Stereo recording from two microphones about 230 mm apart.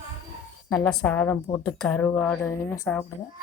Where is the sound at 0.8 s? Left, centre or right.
Centre.